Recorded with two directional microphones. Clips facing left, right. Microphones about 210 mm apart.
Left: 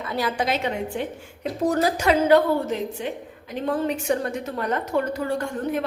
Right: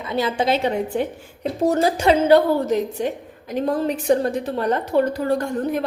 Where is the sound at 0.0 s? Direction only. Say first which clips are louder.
Right 4 dB; 20° right (ahead or behind).